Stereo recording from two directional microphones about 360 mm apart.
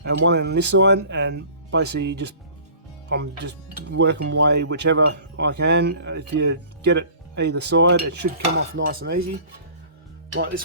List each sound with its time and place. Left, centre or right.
0.0 s speech: right